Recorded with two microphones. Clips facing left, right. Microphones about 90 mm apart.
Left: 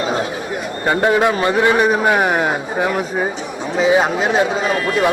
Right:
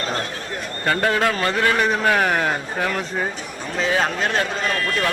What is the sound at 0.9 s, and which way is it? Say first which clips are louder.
Speech: left 5 dB; 20° left (ahead or behind).